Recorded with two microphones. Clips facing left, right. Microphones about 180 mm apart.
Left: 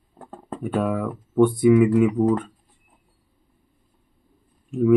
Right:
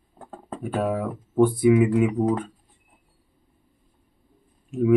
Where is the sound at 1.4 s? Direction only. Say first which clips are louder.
Left 2 dB; centre (ahead or behind).